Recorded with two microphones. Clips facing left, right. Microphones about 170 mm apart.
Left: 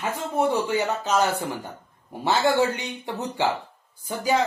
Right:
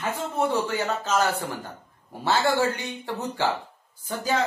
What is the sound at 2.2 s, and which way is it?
A man's voice, 15° left (ahead or behind).